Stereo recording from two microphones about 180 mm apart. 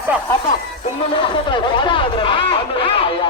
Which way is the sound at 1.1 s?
25° left (ahead or behind).